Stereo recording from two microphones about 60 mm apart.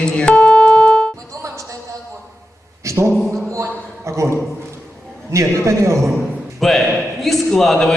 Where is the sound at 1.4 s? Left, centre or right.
Right.